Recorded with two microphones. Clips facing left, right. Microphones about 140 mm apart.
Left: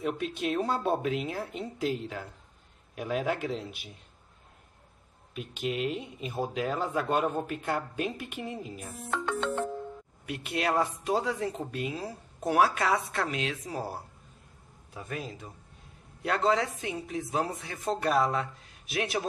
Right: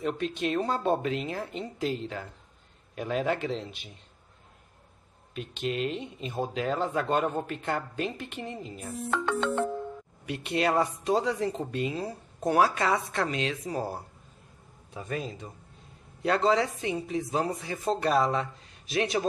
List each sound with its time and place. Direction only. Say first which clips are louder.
0.0 s speech: right 1 dB; 5° left (ahead or behind)
5.3 s speech: right 1 dB; 5° left (ahead or behind)
9.1 s music: right 2 dB; 80° right
10.2 s speech: right 3 dB; centre (ahead or behind)